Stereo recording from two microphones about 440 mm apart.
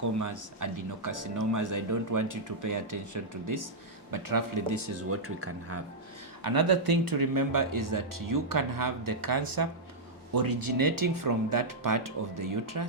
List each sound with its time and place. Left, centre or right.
0.0 s speech: right
6.4 s speech: right